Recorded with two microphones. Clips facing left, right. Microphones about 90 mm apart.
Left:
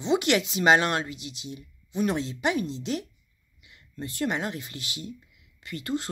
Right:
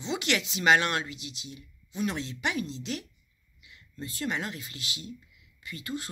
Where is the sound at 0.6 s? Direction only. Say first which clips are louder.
Left 2 dB; 35° left (ahead or behind).